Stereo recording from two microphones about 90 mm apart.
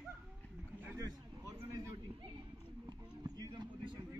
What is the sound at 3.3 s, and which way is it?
Vehicle, 50° right (ahead or behind).